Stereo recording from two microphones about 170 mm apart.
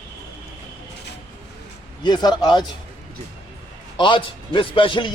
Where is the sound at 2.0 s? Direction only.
25° left (ahead or behind).